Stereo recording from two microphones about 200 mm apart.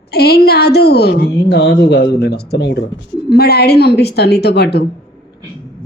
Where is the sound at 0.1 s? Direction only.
50° left (ahead or behind).